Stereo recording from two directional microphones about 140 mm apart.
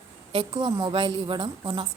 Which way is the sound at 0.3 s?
40° right (ahead or behind).